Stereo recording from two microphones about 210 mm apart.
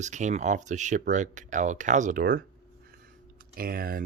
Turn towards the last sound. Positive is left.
turn(degrees=-45)  # may be behind; listen again after turning